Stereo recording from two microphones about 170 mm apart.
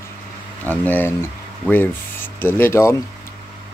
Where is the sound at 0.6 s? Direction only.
10° left (ahead or behind).